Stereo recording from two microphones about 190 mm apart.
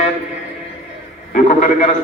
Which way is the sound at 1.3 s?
40° left (ahead or behind).